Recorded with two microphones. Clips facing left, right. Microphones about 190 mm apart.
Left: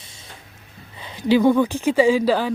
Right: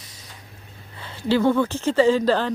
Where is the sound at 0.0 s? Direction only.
25° left (ahead or behind).